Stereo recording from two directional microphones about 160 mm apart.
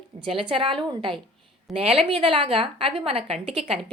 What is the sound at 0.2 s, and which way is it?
A woman's voice, 35° right (ahead or behind).